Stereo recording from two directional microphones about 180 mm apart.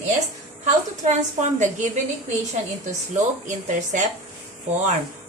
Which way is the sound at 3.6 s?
45° right (ahead or behind).